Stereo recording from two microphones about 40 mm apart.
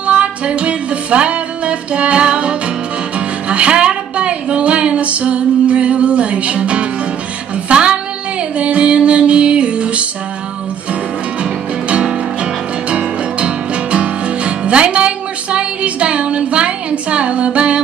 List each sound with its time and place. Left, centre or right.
0.0 s music: right
13.9 s music: right